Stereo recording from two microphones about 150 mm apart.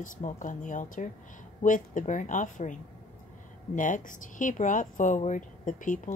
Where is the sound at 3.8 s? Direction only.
60° left (ahead or behind).